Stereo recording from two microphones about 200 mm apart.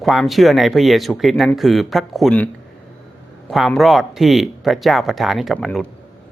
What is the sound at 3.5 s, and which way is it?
Speech, centre (ahead or behind).